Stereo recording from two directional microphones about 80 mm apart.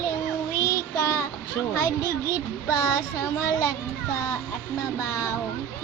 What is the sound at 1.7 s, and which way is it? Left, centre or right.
A child's voice, left.